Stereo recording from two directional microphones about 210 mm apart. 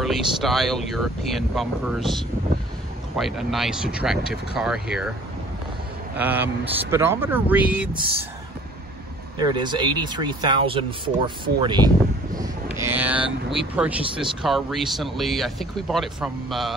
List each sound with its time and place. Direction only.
0.0 s speech: centre (ahead or behind)
6.1 s speech: 10° right (ahead or behind)
9.4 s speech: 20° right (ahead or behind)
12.7 s a sound: 10° right (ahead or behind)
13.7 s speech: 5° right (ahead or behind)